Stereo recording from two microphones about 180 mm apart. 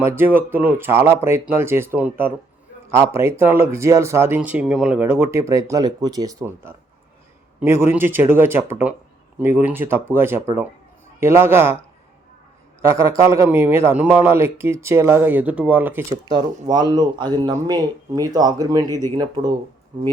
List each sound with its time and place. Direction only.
0.0 s a man's voice: 10° right (ahead or behind)
12.9 s a man's voice: 15° right (ahead or behind)